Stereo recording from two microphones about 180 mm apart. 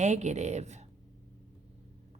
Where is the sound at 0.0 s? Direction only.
40° right (ahead or behind).